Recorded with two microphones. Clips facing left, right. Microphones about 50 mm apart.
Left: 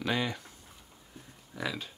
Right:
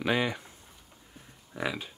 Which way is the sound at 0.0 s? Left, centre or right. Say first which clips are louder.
Right 3 dB; centre.